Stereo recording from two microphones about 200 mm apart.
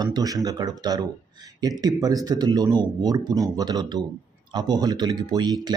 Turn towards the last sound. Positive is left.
turn(degrees=-20)  # may be behind; listen again after turning